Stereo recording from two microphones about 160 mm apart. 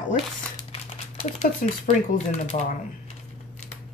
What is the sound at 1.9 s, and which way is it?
Speech, 45° left (ahead or behind).